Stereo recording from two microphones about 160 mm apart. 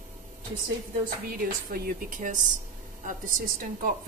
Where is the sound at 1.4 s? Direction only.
60° right (ahead or behind).